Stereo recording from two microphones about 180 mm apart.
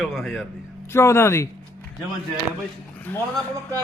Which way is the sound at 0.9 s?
15° left (ahead or behind).